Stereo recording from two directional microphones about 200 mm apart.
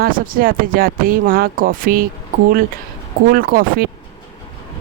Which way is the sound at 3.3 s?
45° right (ahead or behind).